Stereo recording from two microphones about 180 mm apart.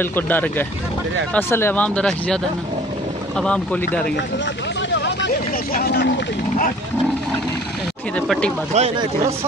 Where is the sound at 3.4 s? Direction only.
5° left (ahead or behind).